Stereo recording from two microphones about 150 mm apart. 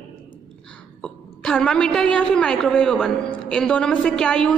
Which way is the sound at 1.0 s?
5° left (ahead or behind).